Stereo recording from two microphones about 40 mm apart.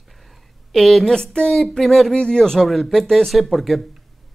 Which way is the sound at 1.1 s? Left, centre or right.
Left.